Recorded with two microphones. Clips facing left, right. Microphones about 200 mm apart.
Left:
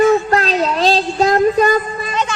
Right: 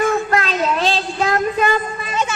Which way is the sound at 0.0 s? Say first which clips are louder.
Left 5 dB; 35° left (ahead or behind).